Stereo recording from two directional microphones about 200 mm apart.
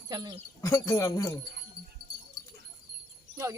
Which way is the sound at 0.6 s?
15° left (ahead or behind).